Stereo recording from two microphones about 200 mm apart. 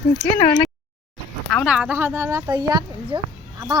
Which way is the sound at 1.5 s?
5° right (ahead or behind).